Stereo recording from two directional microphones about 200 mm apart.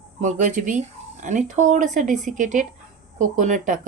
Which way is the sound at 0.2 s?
40° right (ahead or behind).